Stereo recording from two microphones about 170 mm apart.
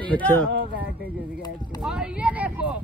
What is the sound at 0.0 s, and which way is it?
Speech, 10° left (ahead or behind).